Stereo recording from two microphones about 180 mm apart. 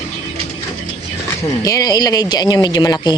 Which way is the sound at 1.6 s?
20° left (ahead or behind).